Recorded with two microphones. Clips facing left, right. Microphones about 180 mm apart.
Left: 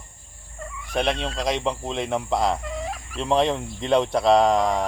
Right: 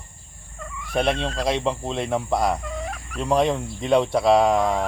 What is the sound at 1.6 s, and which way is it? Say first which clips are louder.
Speech: right 1 dB; 15° right (ahead or behind).